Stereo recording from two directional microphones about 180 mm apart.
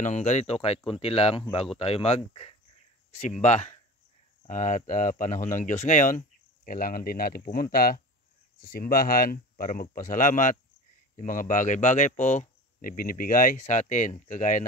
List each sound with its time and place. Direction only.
0.0 s speech: 40° left (ahead or behind)